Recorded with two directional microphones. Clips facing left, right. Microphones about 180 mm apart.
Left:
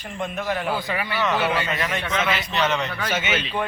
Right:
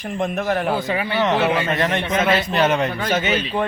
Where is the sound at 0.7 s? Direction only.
20° right (ahead or behind).